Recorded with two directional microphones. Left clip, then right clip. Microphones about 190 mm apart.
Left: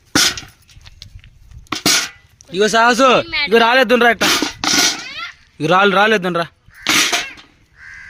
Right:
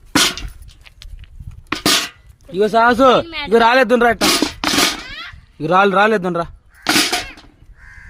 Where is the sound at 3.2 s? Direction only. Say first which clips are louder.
Left 7 dB; 65° right (ahead or behind).